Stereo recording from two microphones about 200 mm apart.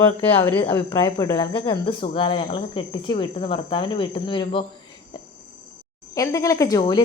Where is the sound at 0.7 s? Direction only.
15° left (ahead or behind).